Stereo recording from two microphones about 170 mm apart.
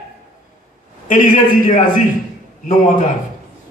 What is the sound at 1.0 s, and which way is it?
Speech, 50° left (ahead or behind).